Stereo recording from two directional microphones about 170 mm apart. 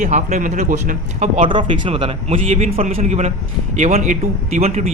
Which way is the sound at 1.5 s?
30° right (ahead or behind).